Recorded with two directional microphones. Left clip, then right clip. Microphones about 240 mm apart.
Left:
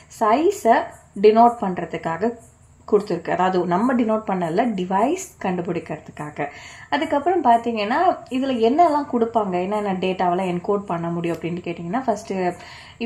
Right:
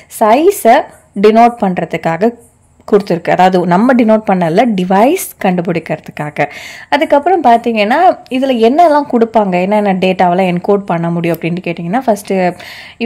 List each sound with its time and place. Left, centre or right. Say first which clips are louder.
0.2 s a woman's voice: right 10 dB; right